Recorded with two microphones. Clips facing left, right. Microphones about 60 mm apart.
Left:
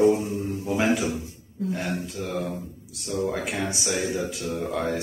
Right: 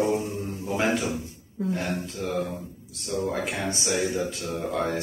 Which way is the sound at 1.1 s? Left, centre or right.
Right.